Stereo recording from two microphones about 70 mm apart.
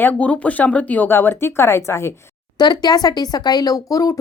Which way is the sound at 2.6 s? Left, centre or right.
Left.